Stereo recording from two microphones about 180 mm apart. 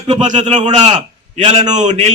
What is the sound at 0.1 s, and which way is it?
A man's voice, 40° right (ahead or behind).